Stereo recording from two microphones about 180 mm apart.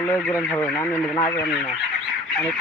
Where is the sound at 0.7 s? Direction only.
15° left (ahead or behind).